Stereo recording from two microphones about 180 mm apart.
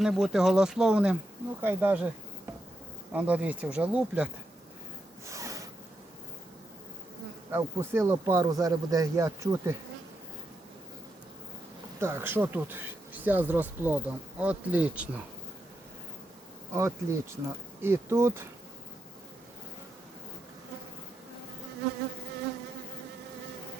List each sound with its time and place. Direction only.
0.0 s speech: centre (ahead or behind)
3.1 s speech: 10° right (ahead or behind)
5.2 s a sound: 15° right (ahead or behind)
7.5 s speech: 15° right (ahead or behind)
11.9 s speech: 15° right (ahead or behind)
16.7 s speech: 15° right (ahead or behind)